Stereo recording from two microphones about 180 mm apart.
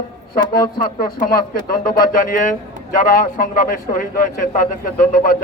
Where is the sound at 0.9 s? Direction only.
55° left (ahead or behind).